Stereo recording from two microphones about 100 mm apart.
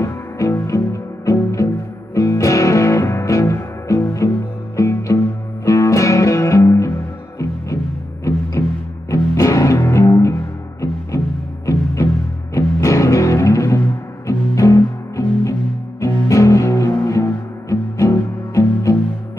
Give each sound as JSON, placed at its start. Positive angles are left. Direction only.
{"t": 0.0, "sound": "music", "side_deg": 25}
{"t": 8.6, "sound": "music", "side_deg": 30}
{"t": 11.6, "sound": "music", "side_deg": 30}